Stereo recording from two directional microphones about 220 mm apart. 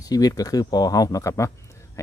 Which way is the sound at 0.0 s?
15° left (ahead or behind).